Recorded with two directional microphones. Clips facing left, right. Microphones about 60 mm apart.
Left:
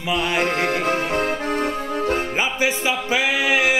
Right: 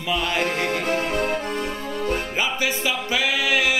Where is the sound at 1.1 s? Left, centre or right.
Left.